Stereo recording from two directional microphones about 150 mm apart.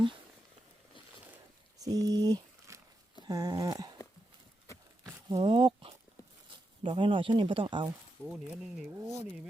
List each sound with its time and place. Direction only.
1.8 s speech: 25° right (ahead or behind)
3.2 s a sound: 25° right (ahead or behind)
5.3 s speech: 35° right (ahead or behind)
8.3 s speech: 5° right (ahead or behind)